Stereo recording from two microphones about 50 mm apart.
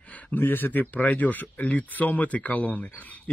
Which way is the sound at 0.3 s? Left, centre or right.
Left.